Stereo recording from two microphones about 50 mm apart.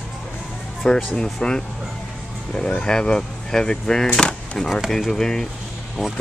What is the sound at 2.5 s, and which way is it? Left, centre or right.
Speech, centre.